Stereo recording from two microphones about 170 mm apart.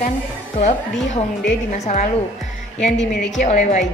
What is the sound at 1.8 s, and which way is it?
Speech, 45° left (ahead or behind).